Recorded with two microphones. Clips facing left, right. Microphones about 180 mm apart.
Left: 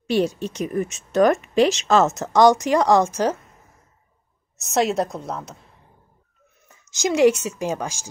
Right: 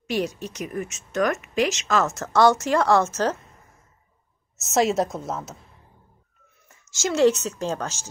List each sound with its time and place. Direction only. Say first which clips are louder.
0.0 s speech: left 5 dB; 30° left (ahead or behind); by 3.3 s 10° left (ahead or behind)
4.6 s a woman's voice: even; centre (ahead or behind)
6.7 s speech: left 3 dB; 20° left (ahead or behind)